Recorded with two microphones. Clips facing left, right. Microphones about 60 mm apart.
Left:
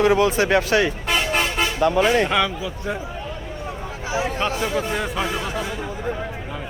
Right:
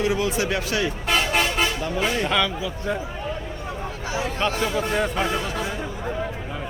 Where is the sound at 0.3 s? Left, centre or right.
Left.